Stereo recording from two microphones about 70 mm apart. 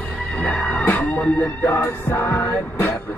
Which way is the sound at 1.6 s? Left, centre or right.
Left.